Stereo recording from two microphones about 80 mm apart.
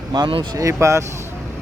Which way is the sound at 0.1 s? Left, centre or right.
Right.